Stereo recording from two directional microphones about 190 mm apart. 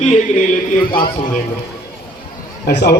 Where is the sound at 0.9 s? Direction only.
45° left (ahead or behind).